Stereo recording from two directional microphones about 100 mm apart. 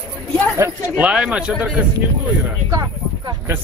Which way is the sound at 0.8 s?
10° right (ahead or behind).